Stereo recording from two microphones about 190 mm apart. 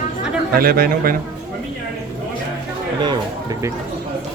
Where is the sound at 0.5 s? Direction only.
50° right (ahead or behind).